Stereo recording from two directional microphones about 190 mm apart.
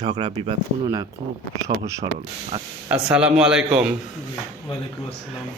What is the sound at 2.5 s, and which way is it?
Speech, 25° right (ahead or behind).